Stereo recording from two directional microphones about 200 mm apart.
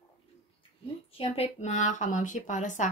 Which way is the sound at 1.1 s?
30° left (ahead or behind).